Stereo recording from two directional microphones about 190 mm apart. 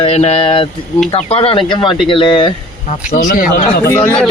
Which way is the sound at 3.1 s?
50° left (ahead or behind).